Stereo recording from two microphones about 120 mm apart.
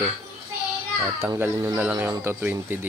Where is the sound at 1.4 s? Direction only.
25° right (ahead or behind).